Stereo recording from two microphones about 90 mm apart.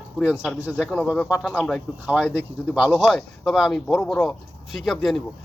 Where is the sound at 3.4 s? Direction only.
Centre (ahead or behind).